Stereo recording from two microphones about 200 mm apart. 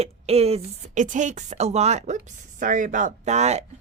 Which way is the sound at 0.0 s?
30° right (ahead or behind).